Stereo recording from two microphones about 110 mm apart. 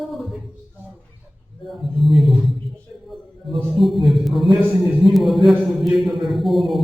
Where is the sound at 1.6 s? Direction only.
Centre (ahead or behind).